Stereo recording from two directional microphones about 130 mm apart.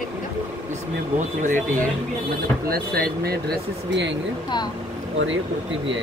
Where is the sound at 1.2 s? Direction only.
80° right.